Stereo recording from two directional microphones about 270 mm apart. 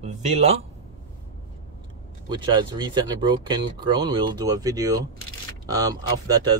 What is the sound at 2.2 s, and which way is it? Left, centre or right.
Speech, centre.